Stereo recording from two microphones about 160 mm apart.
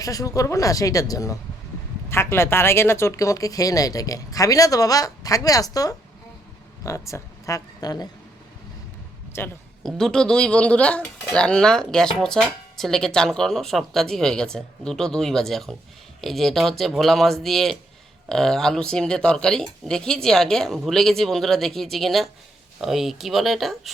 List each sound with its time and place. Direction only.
0.0 s speech: 20° left (ahead or behind)
9.3 s speech: 15° left (ahead or behind)
9.8 s speech: 5° left (ahead or behind)